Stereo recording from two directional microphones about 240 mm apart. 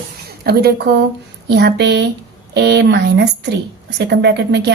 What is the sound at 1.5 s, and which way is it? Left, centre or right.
A woman's voice, right.